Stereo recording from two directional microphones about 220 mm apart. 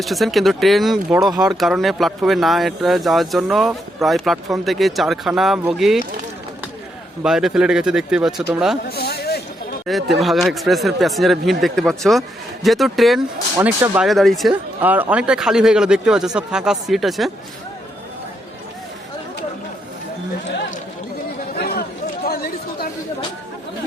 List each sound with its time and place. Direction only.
0.0 s speech: centre (ahead or behind)
7.2 s speech: centre (ahead or behind)
8.9 s a sound: 45° left (ahead or behind)
9.8 s speech: centre (ahead or behind)
21.5 s chatter: 45° left (ahead or behind)